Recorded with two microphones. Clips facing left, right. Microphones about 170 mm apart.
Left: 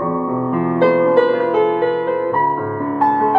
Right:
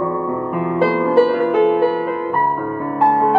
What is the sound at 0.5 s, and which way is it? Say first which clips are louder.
Music: left 4 dB; 10° right (ahead or behind).